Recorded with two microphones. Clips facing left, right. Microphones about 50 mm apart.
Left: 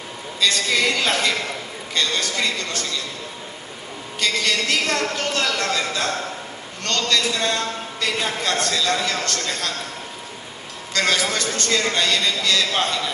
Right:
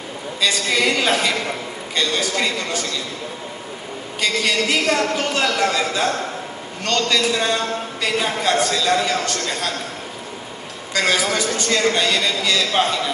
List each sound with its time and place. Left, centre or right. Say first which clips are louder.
0.4 s a man's voice: right 1 dB; centre
4.2 s a man's voice: right 2 dB; centre
10.9 s a man's voice: right 2 dB; centre